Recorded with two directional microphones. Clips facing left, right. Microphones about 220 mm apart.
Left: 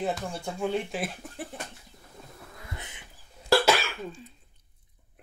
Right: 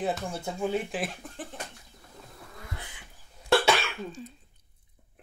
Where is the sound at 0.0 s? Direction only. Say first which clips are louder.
Even; 5° right (ahead or behind).